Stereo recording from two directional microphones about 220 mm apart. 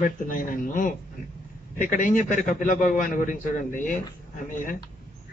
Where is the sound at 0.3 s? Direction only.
35° left (ahead or behind).